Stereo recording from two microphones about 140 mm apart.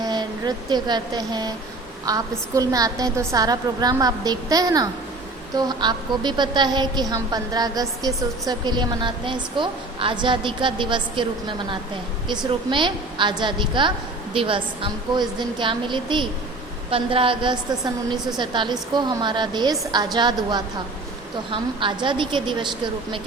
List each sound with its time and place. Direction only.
0.0 s a woman's voice: 30° right (ahead or behind)